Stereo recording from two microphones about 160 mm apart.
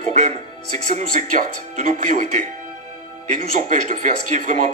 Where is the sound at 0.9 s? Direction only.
50° right (ahead or behind).